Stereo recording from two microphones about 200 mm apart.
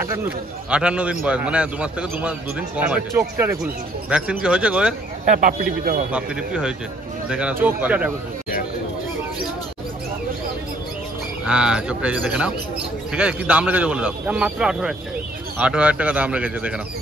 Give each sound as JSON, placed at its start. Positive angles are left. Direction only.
{"t": 0.0, "sound": "a man's voice", "side_deg": -10}
{"t": 5.2, "sound": "speech", "side_deg": -40}
{"t": 6.1, "sound": "a man's voice", "side_deg": -5}
{"t": 11.4, "sound": "a man's voice", "side_deg": -5}